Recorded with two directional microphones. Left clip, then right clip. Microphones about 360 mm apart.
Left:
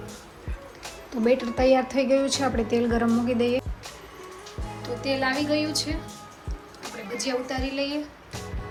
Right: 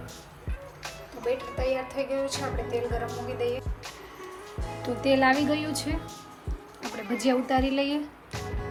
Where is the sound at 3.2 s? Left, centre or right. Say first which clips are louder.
Left 5 dB; left.